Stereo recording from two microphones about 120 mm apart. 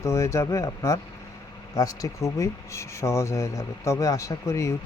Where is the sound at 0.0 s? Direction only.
25° left (ahead or behind).